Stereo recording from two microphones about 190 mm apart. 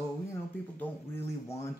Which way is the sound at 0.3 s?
15° left (ahead or behind).